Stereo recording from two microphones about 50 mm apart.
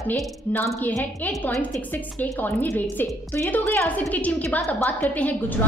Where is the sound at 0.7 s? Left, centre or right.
Left.